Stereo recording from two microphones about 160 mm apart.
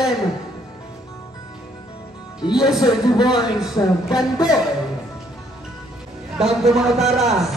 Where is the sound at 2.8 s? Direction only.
30° left (ahead or behind).